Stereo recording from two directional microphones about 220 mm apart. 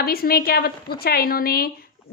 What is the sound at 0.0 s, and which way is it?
A woman's voice, 45° left (ahead or behind).